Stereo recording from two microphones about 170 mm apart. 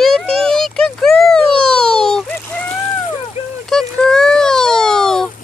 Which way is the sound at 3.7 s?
5° left (ahead or behind).